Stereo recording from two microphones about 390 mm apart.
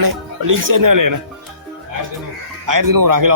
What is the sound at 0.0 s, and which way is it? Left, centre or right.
Speech, right.